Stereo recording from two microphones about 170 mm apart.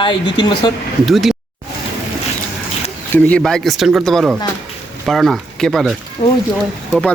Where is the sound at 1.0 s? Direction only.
Centre (ahead or behind).